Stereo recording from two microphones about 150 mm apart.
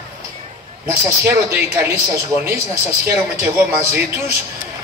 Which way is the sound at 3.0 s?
20° right (ahead or behind).